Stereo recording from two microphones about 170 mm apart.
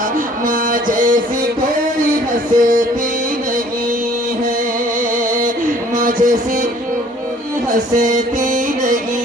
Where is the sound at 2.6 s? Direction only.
50° right (ahead or behind).